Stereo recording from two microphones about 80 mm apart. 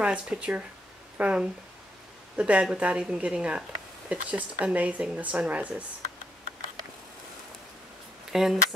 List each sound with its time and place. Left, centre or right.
0.0 s speech: centre
8.3 s speech: centre